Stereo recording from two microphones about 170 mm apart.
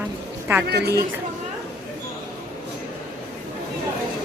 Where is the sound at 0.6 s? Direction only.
70° right (ahead or behind).